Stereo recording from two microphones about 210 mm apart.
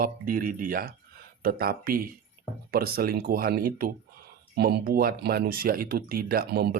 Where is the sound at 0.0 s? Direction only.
40° right (ahead or behind).